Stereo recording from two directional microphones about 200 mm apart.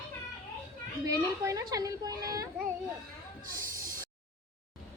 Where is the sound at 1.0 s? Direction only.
15° right (ahead or behind).